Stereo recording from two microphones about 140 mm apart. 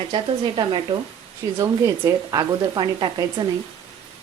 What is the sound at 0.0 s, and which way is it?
Speech, 35° right (ahead or behind).